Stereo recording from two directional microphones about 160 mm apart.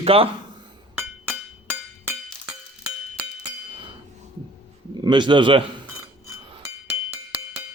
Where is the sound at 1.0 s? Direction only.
10° right (ahead or behind).